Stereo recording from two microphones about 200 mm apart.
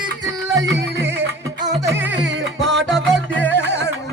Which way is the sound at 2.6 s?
65° right (ahead or behind).